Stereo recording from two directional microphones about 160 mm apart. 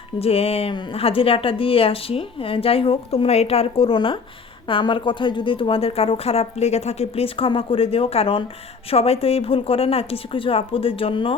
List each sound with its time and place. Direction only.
0.2 s speech: 40° left (ahead or behind)